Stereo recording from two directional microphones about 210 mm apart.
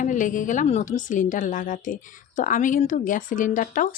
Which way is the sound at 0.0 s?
40° left (ahead or behind).